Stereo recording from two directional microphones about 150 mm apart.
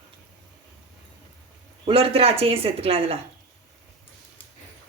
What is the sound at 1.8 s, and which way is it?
A woman's voice, 40° right (ahead or behind).